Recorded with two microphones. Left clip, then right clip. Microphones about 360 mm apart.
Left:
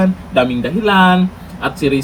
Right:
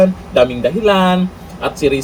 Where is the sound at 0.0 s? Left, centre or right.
Centre.